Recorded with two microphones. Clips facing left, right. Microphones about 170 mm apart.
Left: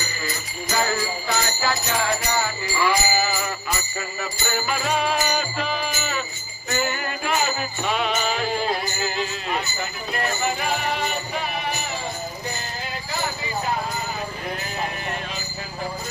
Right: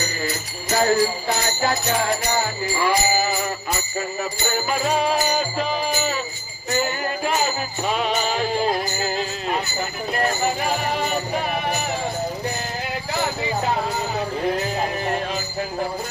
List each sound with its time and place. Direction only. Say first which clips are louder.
0.8 s jingle bell: right 7 dB; 45° right (ahead or behind)
1.3 s music: right 2 dB; 40° right (ahead or behind)